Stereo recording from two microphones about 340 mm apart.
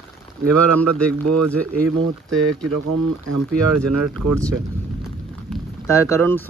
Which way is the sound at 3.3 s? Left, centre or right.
Right.